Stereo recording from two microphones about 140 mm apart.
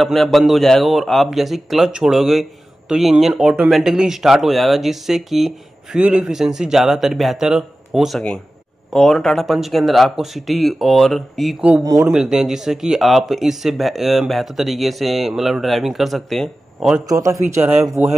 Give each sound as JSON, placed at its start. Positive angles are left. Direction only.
{"t": 0.0, "sound": "speech", "side_deg": 0}
{"t": 11.8, "sound": "a man's voice", "side_deg": -25}
{"t": 12.1, "sound": "speech", "side_deg": -5}
{"t": 17.0, "sound": "a man's voice", "side_deg": -25}
{"t": 18.0, "sound": "speech", "side_deg": -15}